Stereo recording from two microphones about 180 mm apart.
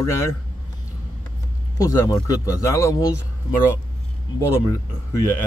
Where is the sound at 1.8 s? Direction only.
15° left (ahead or behind).